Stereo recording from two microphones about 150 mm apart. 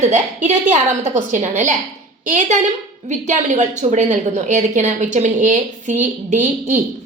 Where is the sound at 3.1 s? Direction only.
55° right (ahead or behind).